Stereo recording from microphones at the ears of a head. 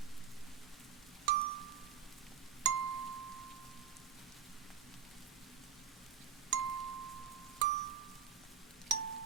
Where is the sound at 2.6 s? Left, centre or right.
Right.